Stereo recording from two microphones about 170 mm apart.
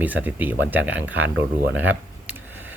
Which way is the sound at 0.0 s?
10° right (ahead or behind).